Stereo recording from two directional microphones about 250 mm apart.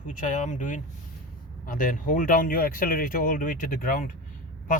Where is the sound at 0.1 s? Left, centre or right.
Left.